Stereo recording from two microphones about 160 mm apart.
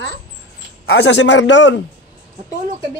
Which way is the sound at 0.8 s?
90° left.